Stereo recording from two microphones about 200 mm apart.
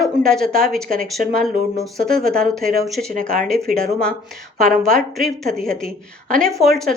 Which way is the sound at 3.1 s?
40° right (ahead or behind).